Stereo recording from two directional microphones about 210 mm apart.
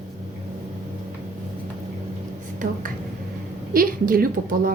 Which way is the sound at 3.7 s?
40° right (ahead or behind).